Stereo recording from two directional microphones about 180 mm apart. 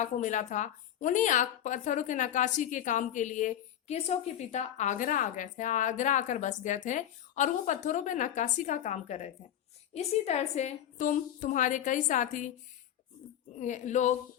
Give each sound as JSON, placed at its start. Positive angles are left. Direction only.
{"t": 0.0, "sound": "a woman's voice", "side_deg": 45}
{"t": 13.6, "sound": "a woman's voice", "side_deg": 45}